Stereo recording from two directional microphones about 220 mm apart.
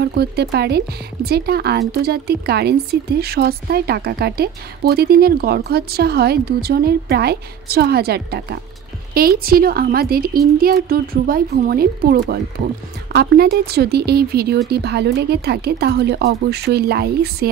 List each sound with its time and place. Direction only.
0.0 s speech: 45° right (ahead or behind)